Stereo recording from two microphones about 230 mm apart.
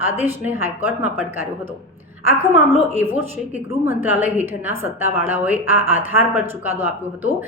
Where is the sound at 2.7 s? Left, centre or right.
Centre.